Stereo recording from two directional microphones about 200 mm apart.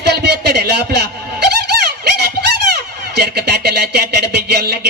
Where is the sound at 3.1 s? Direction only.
55° right (ahead or behind).